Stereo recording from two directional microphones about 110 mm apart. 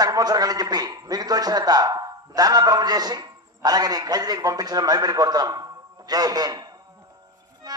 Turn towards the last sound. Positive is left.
turn(degrees=-35)  # may be behind; listen again after turning